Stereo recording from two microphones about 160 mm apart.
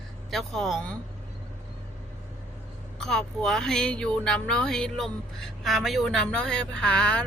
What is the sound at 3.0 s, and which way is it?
Speech, 5° left (ahead or behind).